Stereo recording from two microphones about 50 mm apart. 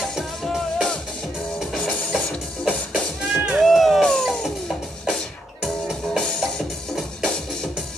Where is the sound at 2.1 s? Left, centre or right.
Centre.